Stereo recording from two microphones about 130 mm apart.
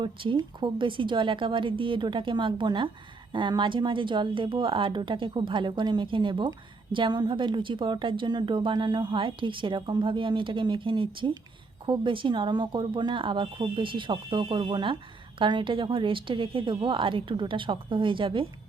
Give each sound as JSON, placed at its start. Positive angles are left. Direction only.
{"t": 0.0, "sound": "a woman's voice", "side_deg": -40}